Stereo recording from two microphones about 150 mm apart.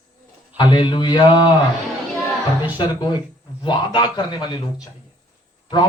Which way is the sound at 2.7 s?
30° left (ahead or behind).